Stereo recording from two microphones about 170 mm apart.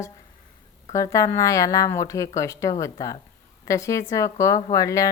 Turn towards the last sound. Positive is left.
turn(degrees=20)  # may be behind; listen again after turning